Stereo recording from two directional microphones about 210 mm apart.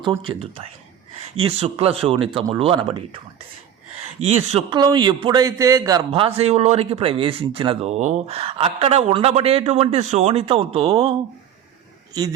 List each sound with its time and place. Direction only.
0.0 s speech: 20° right (ahead or behind)
4.2 s a man's voice: 30° right (ahead or behind)
6.1 s speech: 25° right (ahead or behind)